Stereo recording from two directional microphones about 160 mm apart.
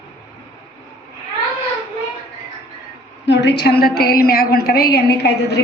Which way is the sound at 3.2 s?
90° left.